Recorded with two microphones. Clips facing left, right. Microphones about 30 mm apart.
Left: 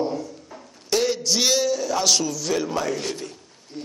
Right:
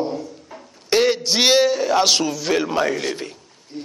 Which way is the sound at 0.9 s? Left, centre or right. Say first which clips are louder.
Right 4 dB; right.